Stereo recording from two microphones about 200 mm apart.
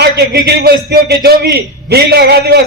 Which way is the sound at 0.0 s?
55° right (ahead or behind).